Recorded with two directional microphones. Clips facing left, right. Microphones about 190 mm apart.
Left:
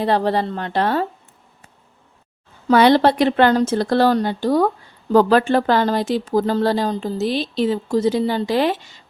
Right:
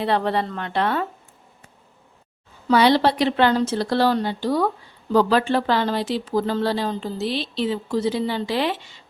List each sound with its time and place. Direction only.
0.0 s a woman's voice: 35° left (ahead or behind)
2.6 s speech: 50° left (ahead or behind)